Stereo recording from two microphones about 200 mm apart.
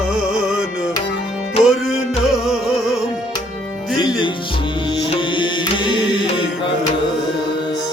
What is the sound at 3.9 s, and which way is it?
Music, 20° left (ahead or behind).